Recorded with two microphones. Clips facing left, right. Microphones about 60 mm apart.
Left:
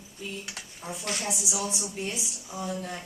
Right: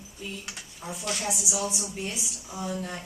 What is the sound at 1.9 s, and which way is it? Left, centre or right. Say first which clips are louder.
Speech: left 1 dB; centre.